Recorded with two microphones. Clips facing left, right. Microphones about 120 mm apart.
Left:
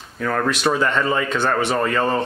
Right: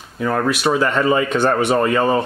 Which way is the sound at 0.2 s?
10° right (ahead or behind).